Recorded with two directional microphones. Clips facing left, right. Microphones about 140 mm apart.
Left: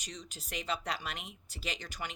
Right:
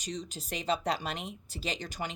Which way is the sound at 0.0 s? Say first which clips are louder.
Right 8 dB; 30° right (ahead or behind).